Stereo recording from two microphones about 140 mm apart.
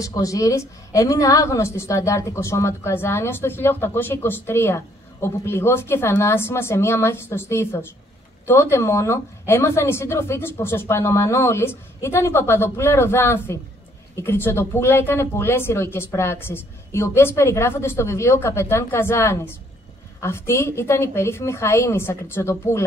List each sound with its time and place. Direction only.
0.0 s a woman's voice: 25° left (ahead or behind)